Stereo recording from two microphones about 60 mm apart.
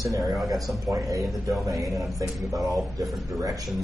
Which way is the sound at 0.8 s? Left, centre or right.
Right.